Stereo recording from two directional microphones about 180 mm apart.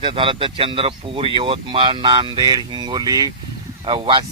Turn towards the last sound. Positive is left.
turn(degrees=-30)  # may be behind; listen again after turning